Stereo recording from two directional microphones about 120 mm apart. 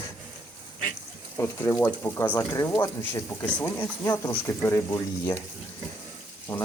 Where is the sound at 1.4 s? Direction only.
20° left (ahead or behind).